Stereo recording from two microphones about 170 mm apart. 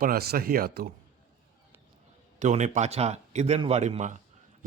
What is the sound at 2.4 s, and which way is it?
A man's voice, 45° right (ahead or behind).